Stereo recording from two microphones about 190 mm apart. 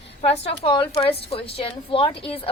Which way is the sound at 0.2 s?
30° left (ahead or behind).